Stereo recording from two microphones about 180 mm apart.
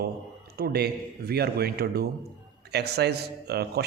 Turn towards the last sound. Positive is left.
turn(degrees=-65)  # may be behind; listen again after turning